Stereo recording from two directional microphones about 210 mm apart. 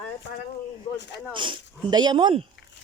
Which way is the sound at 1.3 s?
20° right (ahead or behind).